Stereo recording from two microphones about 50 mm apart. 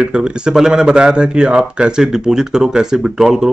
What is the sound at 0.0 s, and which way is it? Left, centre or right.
Speech, centre.